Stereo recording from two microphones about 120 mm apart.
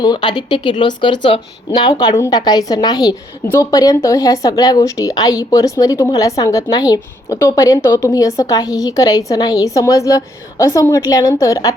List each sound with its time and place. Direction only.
0.0 s a woman's voice: 40° left (ahead or behind)